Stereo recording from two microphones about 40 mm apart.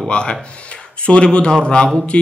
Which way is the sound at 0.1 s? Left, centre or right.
Left.